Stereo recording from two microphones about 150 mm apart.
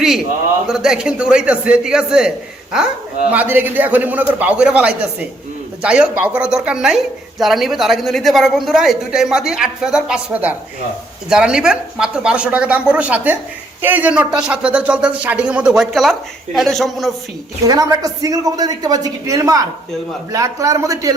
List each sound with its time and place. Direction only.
0.7 s a woman's voice: 5° right (ahead or behind)
3.3 s a woman's voice: 15° right (ahead or behind)
17.7 s a man's voice: 25° right (ahead or behind)